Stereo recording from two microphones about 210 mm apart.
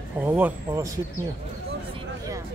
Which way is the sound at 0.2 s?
10° right (ahead or behind).